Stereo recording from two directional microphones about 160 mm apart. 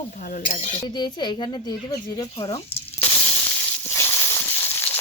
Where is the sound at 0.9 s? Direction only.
25° left (ahead or behind).